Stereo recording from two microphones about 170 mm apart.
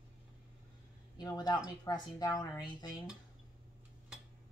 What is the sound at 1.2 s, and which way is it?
Speech, 25° left (ahead or behind).